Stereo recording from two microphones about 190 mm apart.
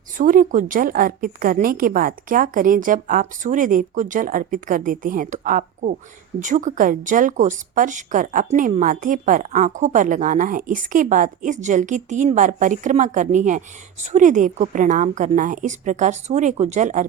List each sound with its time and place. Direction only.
0.2 s a woman's voice: 45° right (ahead or behind)